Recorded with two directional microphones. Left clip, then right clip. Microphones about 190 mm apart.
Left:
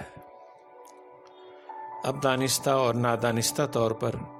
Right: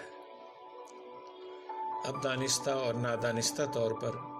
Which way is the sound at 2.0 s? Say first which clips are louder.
Left 11 dB; 45° left (ahead or behind).